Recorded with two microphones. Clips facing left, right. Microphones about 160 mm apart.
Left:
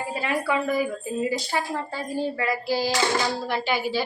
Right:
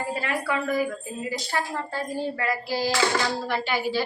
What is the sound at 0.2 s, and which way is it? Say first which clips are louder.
A woman's voice: left 6 dB; 25° left (ahead or behind).